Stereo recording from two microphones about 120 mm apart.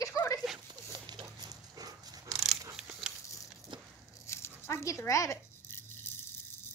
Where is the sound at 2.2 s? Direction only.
Centre (ahead or behind).